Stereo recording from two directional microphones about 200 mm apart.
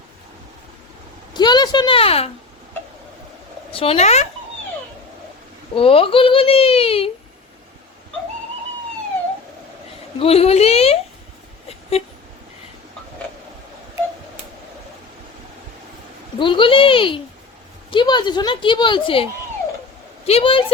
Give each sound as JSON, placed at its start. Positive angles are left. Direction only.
{"t": 1.3, "sound": "a woman's voice", "side_deg": 20}
{"t": 3.7, "sound": "a woman's voice", "side_deg": 30}
{"t": 5.7, "sound": "speech", "side_deg": 30}
{"t": 10.2, "sound": "a woman's voice", "side_deg": 30}
{"t": 11.7, "sound": "a sound", "side_deg": 30}
{"t": 16.4, "sound": "a woman's voice", "side_deg": 25}